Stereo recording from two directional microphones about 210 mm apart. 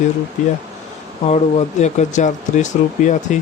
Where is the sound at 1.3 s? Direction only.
35° left (ahead or behind).